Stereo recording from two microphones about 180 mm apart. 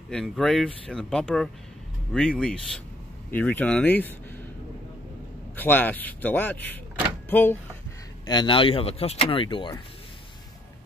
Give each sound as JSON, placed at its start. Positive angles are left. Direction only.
{"t": 0.1, "sound": "speech", "side_deg": 0}
{"t": 5.6, "sound": "speech", "side_deg": 10}
{"t": 8.3, "sound": "speech", "side_deg": 25}